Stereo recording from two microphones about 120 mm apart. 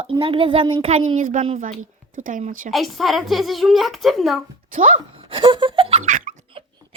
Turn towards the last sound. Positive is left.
turn(degrees=-50)  # may be behind; listen again after turning